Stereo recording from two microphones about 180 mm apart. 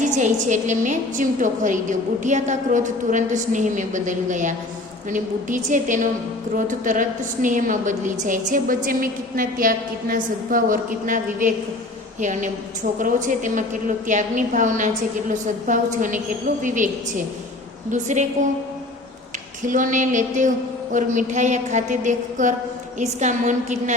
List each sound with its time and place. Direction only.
0.0 s a woman's voice: 45° right (ahead or behind)
17.9 s a woman's voice: 40° right (ahead or behind)
19.6 s a woman's voice: 45° right (ahead or behind)